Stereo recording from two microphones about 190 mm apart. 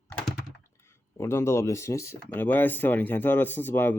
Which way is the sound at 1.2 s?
15° left (ahead or behind).